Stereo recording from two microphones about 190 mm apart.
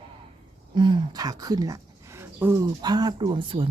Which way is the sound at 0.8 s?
20° right (ahead or behind).